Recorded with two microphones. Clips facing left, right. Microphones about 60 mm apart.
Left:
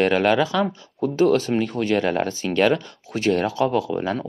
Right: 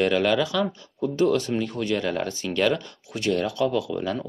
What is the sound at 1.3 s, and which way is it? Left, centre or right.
Speech, left.